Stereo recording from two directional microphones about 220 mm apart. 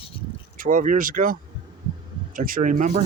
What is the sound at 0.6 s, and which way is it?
Speech, 40° right (ahead or behind).